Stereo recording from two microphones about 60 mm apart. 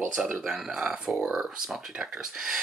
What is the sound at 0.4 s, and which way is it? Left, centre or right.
Speech, centre.